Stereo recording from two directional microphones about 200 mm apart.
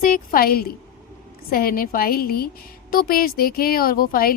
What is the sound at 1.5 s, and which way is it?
A woman's voice, 50° left (ahead or behind).